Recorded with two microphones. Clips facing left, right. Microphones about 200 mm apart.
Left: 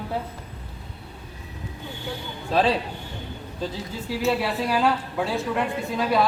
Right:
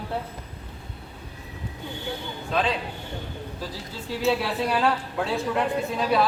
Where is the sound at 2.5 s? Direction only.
35° left (ahead or behind).